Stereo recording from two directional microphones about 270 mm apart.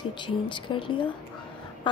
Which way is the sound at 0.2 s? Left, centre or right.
Centre.